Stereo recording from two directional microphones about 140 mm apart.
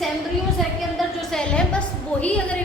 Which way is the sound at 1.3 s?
10° left (ahead or behind).